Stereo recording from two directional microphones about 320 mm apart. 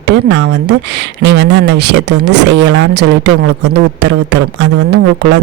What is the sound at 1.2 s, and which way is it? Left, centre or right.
Speech, right.